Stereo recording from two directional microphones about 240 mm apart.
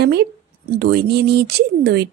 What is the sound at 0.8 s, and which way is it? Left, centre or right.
Speech, right.